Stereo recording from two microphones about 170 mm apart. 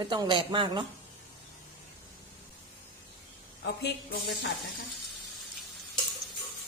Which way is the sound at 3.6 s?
75° left (ahead or behind).